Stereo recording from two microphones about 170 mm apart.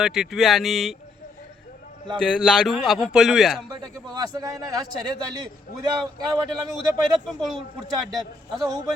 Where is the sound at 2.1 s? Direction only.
5° left (ahead or behind).